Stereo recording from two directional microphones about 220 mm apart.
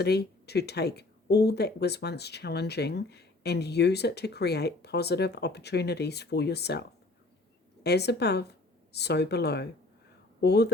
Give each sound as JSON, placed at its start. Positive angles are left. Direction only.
{"t": 0.0, "sound": "speech", "side_deg": 45}
{"t": 7.9, "sound": "speech", "side_deg": 50}